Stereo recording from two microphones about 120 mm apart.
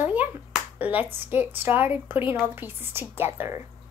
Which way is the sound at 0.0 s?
15° right (ahead or behind).